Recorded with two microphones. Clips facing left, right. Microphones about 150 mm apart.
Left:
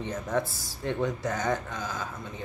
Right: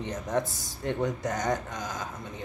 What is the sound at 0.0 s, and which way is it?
Speech, 20° right (ahead or behind).